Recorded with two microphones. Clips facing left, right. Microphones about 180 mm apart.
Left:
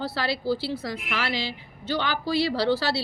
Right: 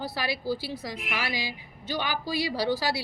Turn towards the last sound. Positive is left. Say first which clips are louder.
# left 3 dB
turn(degrees=-15)  # may be behind; listen again after turning